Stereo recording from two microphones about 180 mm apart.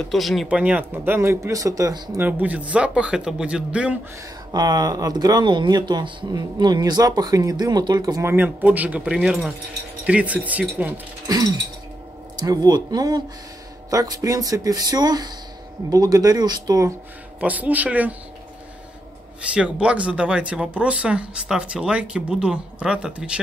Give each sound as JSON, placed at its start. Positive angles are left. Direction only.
{"t": 0.0, "sound": "speech", "side_deg": 0}
{"t": 4.5, "sound": "speech", "side_deg": -20}
{"t": 11.2, "sound": "speech", "side_deg": -20}
{"t": 17.4, "sound": "speech", "side_deg": -10}
{"t": 19.5, "sound": "speech", "side_deg": -5}